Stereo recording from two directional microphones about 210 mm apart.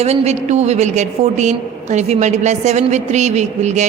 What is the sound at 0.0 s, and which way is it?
A woman's voice, 30° right (ahead or behind).